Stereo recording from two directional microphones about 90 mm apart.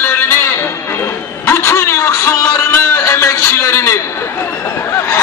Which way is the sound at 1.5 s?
30° left (ahead or behind).